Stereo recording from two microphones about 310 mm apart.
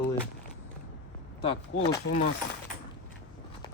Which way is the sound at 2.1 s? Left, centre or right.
Left.